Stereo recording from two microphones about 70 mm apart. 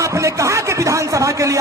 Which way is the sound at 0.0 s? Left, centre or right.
Right.